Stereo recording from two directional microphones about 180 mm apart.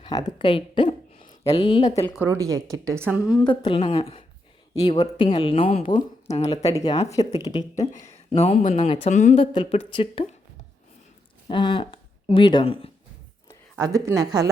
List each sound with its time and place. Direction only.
0.0 s speech: 20° left (ahead or behind)
2.1 s speech: 15° right (ahead or behind)
3.5 s speech: 30° left (ahead or behind)
7.3 s speech: 20° left (ahead or behind)
7.6 s speech: 40° left (ahead or behind)
9.6 s speech: 30° left (ahead or behind)
11.4 s speech: 25° left (ahead or behind)
13.7 s speech: 20° right (ahead or behind)